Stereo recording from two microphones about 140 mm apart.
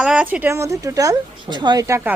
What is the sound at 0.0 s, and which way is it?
Speech, 5° right (ahead or behind).